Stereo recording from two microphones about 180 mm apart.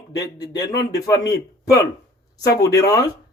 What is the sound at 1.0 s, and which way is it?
Speech, 20° left (ahead or behind).